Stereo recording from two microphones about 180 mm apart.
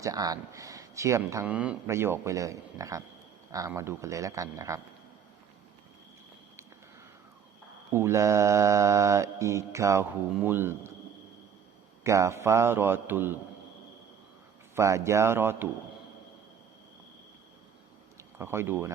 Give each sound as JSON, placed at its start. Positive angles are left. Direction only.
{"t": 0.0, "sound": "speech", "side_deg": -20}
{"t": 7.9, "sound": "speech", "side_deg": -15}
{"t": 12.0, "sound": "speech", "side_deg": -15}
{"t": 14.8, "sound": "speech", "side_deg": -15}
{"t": 18.2, "sound": "speech", "side_deg": -15}